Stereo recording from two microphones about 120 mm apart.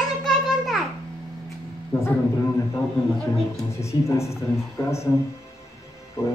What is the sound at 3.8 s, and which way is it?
Speech, 25° left (ahead or behind).